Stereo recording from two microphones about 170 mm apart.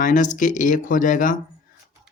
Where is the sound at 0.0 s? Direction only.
50° left (ahead or behind).